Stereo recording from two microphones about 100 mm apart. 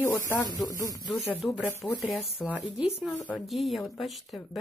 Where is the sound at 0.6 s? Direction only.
40° left (ahead or behind).